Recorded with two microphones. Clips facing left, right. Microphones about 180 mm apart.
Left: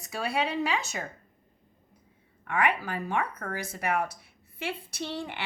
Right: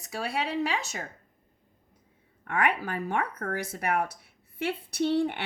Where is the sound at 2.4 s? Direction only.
55° right (ahead or behind).